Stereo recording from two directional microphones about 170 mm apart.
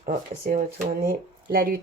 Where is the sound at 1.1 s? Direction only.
60° right (ahead or behind).